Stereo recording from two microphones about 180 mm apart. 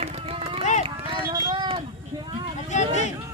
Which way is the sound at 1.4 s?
30° right (ahead or behind).